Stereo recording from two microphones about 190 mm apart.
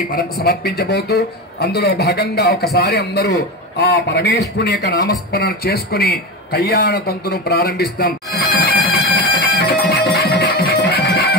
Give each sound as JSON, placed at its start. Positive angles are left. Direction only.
{"t": 0.1, "sound": "a man's voice", "side_deg": 55}
{"t": 8.6, "sound": "a sound", "side_deg": 55}
{"t": 9.6, "sound": "music", "side_deg": 55}